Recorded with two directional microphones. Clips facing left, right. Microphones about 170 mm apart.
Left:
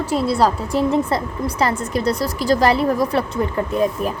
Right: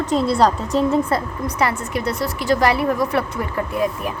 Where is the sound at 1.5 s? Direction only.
35° left (ahead or behind).